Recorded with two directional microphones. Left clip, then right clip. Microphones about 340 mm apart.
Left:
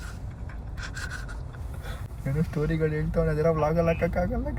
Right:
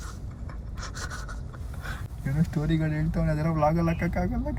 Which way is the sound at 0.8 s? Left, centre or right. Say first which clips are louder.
Left 1 dB; right.